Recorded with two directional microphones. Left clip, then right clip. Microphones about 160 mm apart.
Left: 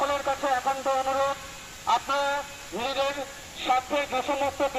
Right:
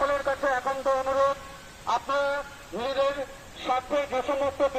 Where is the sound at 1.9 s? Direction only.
15° right (ahead or behind).